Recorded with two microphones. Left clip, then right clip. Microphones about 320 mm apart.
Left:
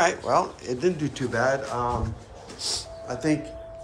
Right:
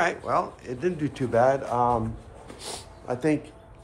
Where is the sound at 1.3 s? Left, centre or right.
Centre.